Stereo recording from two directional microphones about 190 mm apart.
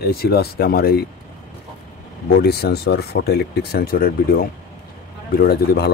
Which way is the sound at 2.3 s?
60° left (ahead or behind).